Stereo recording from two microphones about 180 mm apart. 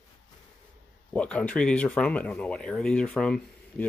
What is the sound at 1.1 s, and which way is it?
Speech, 5° left (ahead or behind).